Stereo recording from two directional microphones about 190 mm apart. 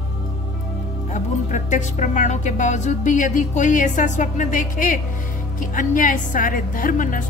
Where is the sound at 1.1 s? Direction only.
40° left (ahead or behind).